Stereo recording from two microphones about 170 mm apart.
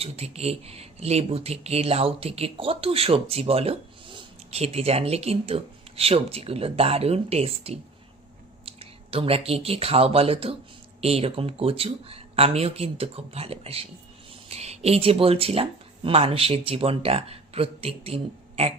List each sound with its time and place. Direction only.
0.0 s speech: 40° right (ahead or behind)